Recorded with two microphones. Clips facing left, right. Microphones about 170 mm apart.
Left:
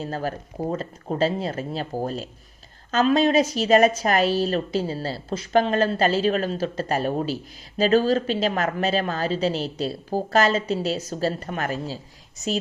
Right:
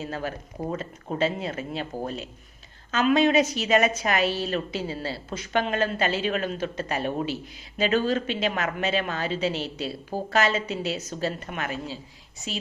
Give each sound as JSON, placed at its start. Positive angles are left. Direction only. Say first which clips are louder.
{"t": 0.0, "sound": "speech", "louder": "left 3 dB", "side_deg": 40}